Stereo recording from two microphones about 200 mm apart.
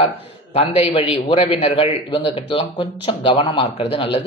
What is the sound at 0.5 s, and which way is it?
Speech, 30° left (ahead or behind).